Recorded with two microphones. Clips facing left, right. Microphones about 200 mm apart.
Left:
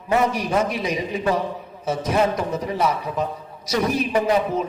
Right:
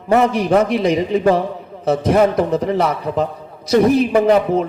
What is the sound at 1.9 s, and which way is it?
A man's voice, 60° right (ahead or behind).